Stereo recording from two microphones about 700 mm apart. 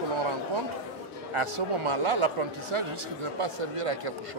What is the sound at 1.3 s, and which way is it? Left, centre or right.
Speech, right.